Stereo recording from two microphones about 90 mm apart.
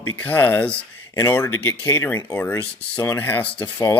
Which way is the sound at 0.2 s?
20° left (ahead or behind).